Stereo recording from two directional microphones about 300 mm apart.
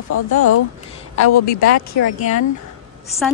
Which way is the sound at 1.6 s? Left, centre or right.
Left.